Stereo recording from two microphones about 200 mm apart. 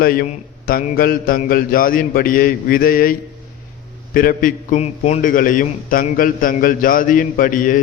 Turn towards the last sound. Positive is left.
turn(degrees=40)  # may be behind; listen again after turning